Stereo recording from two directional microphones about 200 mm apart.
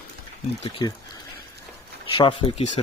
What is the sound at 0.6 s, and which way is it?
Speech, 25° left (ahead or behind).